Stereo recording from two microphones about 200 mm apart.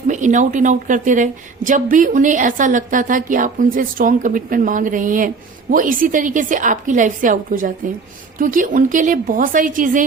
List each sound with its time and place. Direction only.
0.1 s a woman's voice: 40° right (ahead or behind)